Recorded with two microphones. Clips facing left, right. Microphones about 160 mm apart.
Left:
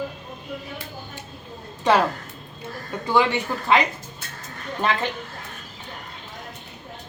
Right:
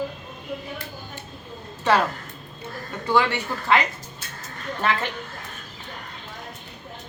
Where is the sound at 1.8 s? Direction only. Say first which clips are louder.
Left 2 dB; 15° left (ahead or behind).